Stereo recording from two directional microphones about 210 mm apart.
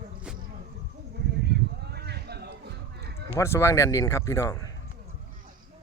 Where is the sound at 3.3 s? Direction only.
15° left (ahead or behind).